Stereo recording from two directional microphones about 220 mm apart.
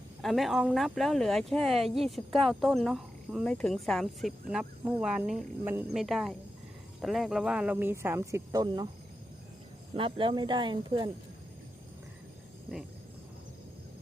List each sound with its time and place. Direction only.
0.2 s speech: centre (ahead or behind); by 8.9 s 20° right (ahead or behind)
9.9 s speech: 25° right (ahead or behind)